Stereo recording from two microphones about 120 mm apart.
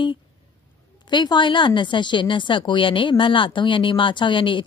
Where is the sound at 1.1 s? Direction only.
40° left (ahead or behind).